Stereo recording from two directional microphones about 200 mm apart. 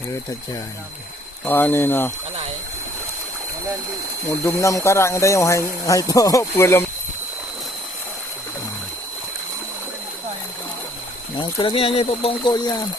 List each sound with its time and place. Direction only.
1.5 s speech: 10° left (ahead or behind)
4.3 s speech: 15° left (ahead or behind)
11.3 s speech: 25° left (ahead or behind)